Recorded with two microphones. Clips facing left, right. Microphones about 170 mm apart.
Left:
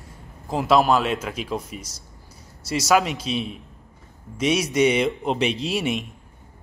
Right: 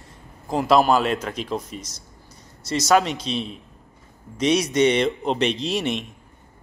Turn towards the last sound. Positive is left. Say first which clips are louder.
# even
turn(degrees=10)  # may be behind; listen again after turning